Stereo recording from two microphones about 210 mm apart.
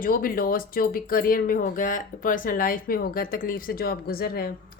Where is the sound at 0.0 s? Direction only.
40° left (ahead or behind).